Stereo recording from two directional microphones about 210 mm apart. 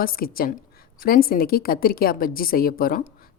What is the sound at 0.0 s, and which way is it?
A woman's voice, 45° left (ahead or behind).